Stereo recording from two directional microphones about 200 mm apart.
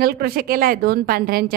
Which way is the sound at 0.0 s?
50° right (ahead or behind).